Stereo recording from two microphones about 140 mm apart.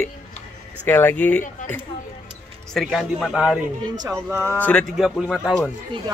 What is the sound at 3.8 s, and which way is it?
Speech, 30° right (ahead or behind).